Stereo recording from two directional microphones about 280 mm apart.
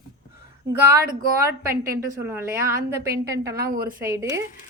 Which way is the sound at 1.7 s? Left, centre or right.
Right.